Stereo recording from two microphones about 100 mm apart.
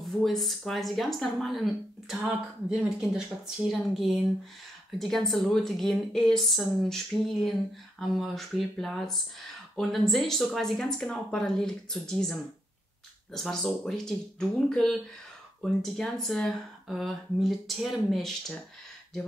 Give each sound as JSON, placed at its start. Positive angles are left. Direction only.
{"t": 0.0, "sound": "speech", "side_deg": 0}